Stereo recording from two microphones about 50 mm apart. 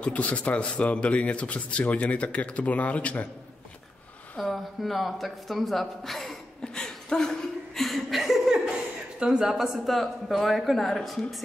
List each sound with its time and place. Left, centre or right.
0.0 s speech: left
4.4 s speech: centre
6.6 s a sound: centre
7.7 s chuckle: centre
9.2 s speech: centre